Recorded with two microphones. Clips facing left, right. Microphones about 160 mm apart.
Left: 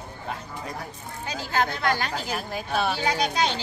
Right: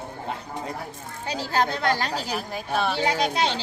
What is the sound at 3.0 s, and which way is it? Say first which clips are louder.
Speech: right 1 dB; 25° right (ahead or behind).